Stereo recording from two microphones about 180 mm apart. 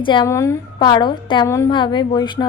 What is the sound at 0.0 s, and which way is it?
Speech, 25° left (ahead or behind).